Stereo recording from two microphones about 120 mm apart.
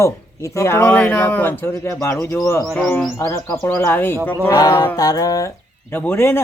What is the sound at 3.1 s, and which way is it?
Speech, 30° left (ahead or behind).